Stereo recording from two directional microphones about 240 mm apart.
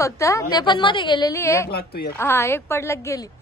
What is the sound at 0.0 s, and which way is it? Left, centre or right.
A woman's voice, centre.